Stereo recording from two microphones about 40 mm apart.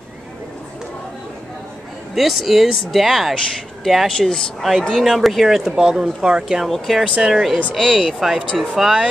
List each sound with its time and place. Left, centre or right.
2.1 s speech: centre
4.1 s speech: centre
4.9 s speech: centre
5.6 s speech: centre
6.6 s speech: centre